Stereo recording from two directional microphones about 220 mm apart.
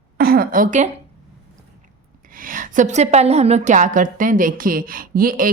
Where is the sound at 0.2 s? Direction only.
45° right (ahead or behind).